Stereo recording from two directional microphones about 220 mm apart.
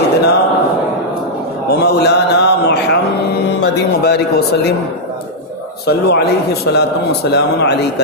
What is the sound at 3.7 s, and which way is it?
Music, 50° left (ahead or behind).